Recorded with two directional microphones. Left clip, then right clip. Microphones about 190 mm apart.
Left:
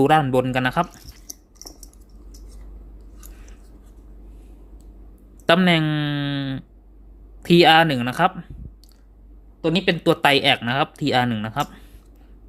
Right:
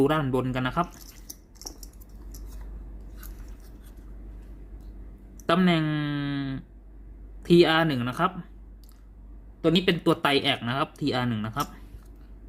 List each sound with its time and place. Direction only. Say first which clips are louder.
0.0 s speech: left 8 dB; 35° left (ahead or behind)
5.5 s speech: left 7 dB; 35° left (ahead or behind)
9.6 s speech: left 2 dB; 15° left (ahead or behind)
9.9 s speech: left 6 dB; 30° left (ahead or behind)